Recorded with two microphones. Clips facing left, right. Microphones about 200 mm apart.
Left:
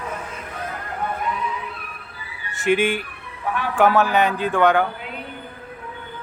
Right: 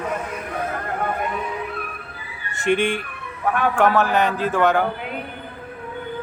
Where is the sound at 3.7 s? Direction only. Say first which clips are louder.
Left 3 dB; centre (ahead or behind).